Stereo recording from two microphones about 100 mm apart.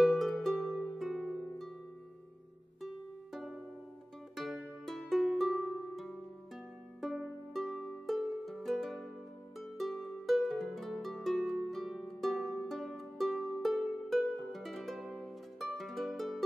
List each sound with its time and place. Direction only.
0.0 s harp: centre (ahead or behind)
4.4 s music: centre (ahead or behind)
9.6 s harp: centre (ahead or behind)
12.6 s music: centre (ahead or behind)